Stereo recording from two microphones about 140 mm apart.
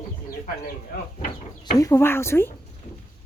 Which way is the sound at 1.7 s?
20° left (ahead or behind).